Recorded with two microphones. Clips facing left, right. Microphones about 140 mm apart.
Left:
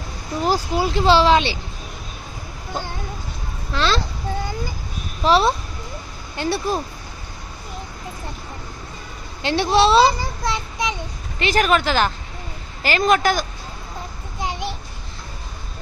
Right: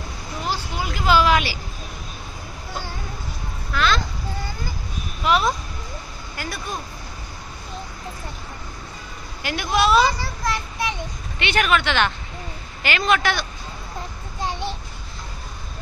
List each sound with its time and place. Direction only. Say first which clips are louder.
0.4 s speech: left 8 dB; 40° left (ahead or behind)
3.7 s speech: left 1 dB; 30° left (ahead or behind)
5.2 s speech: left 4 dB; 30° left (ahead or behind)
9.4 s speech: left 5 dB; 30° left (ahead or behind)
10.2 s child singing: left 1 dB; 20° left (ahead or behind)
11.3 s speech: left 3 dB; 35° left (ahead or behind)
14.4 s a sound: left 1 dB; 15° left (ahead or behind)